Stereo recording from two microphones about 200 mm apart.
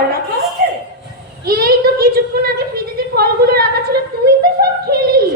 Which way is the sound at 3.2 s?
50° right (ahead or behind).